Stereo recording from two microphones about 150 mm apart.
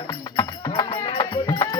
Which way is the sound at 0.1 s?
30° left (ahead or behind).